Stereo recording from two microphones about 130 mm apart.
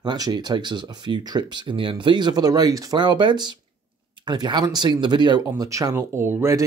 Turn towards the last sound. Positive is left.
turn(degrees=-20)  # may be behind; listen again after turning